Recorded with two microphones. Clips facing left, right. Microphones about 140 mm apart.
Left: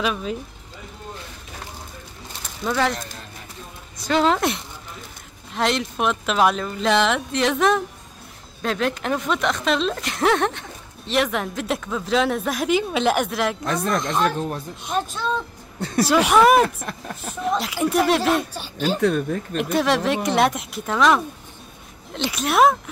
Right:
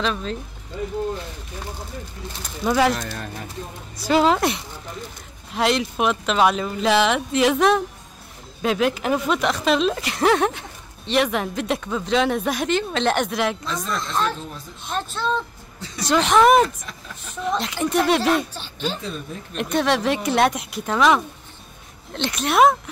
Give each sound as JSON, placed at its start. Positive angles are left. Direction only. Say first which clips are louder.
{"t": 0.0, "sound": "speech", "louder": "even", "side_deg": 10}
{"t": 2.6, "sound": "a woman's voice", "louder": "right 3 dB", "side_deg": 0}
{"t": 4.0, "sound": "a woman's voice", "louder": "right 2 dB", "side_deg": -5}
{"t": 13.7, "sound": "speech", "louder": "left 5 dB", "side_deg": 60}
{"t": 14.9, "sound": "a woman's voice", "louder": "even", "side_deg": 10}
{"t": 16.6, "sound": "speech", "louder": "left 2 dB", "side_deg": 55}
{"t": 17.5, "sound": "a woman's voice", "louder": "left 1 dB", "side_deg": 5}
{"t": 18.9, "sound": "speech", "louder": "left 11 dB", "side_deg": 65}
{"t": 19.5, "sound": "a woman's voice", "louder": "even", "side_deg": 0}